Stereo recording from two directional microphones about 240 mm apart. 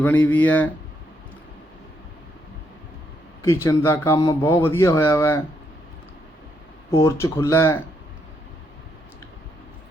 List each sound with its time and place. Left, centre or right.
0.0 s speech: centre
3.4 s speech: centre
6.9 s speech: centre